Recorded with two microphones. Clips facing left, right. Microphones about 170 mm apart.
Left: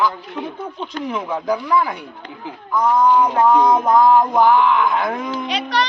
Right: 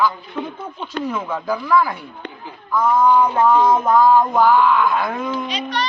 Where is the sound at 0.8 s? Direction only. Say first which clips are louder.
Left 3 dB; 5° right (ahead or behind).